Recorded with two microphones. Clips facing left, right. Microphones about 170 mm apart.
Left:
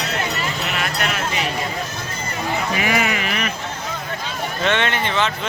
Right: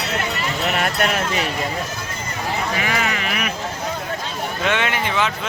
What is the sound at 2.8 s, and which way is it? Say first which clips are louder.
Speech: left 2 dB; 10° left (ahead or behind).